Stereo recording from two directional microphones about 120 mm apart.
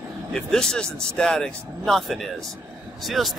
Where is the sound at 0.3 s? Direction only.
5° left (ahead or behind).